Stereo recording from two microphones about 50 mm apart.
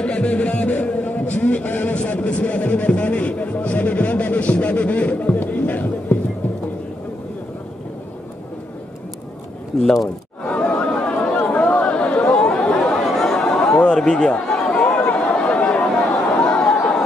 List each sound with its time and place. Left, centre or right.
0.0 s music: left
10.4 s chatter: left
12.8 s chatter: centre
14.7 s chatter: left
16.3 s a sound: centre